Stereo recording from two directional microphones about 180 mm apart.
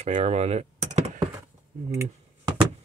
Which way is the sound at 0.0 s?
35° right (ahead or behind).